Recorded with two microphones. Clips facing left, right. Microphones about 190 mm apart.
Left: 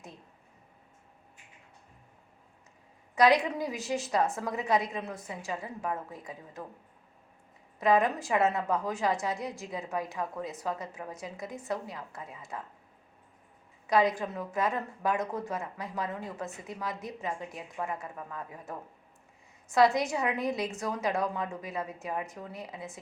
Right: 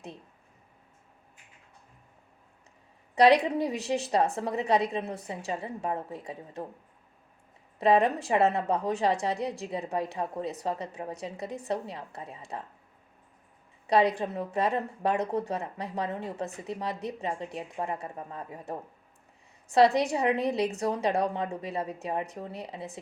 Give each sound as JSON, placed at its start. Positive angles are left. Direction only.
{"t": 3.4, "sound": "a woman's voice", "side_deg": -30}
{"t": 7.8, "sound": "a woman's voice", "side_deg": -30}
{"t": 13.8, "sound": "a woman's voice", "side_deg": -35}
{"t": 19.9, "sound": "a woman's voice", "side_deg": -35}